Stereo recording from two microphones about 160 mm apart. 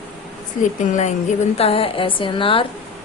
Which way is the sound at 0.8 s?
50° left (ahead or behind).